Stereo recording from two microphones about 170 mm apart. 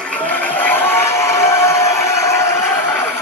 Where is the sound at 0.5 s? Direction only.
10° left (ahead or behind).